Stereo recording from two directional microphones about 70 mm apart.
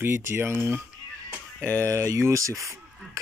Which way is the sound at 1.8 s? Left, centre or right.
Right.